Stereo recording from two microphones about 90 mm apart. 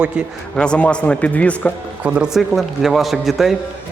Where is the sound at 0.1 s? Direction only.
10° right (ahead or behind).